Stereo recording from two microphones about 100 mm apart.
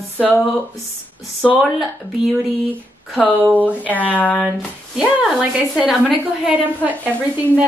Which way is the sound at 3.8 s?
15° left (ahead or behind).